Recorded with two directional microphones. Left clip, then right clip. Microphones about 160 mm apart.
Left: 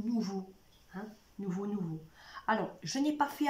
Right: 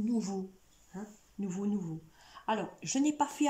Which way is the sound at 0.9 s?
10° right (ahead or behind).